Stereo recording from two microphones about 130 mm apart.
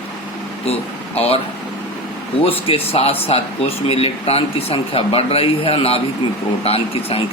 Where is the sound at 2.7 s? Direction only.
50° left (ahead or behind).